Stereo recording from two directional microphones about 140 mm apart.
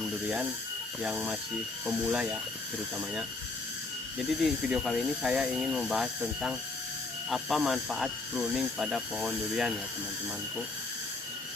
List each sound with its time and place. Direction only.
1.0 s speech: 5° right (ahead or behind)
4.4 s speech: 5° right (ahead or behind)